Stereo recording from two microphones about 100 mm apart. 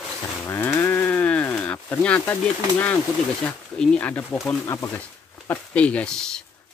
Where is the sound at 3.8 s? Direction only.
15° left (ahead or behind).